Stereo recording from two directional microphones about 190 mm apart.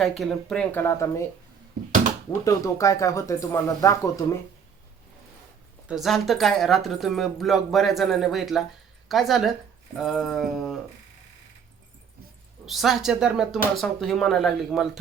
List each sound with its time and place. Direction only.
0.2 s speech: centre (ahead or behind)
2.4 s speech: 15° left (ahead or behind)
5.9 s speech: centre (ahead or behind)
12.6 s speech: centre (ahead or behind)